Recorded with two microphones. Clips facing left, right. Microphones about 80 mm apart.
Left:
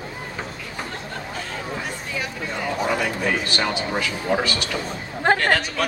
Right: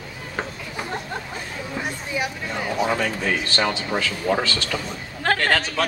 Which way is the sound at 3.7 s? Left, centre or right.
Left.